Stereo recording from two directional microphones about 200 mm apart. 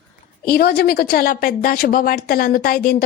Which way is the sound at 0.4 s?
50° left (ahead or behind).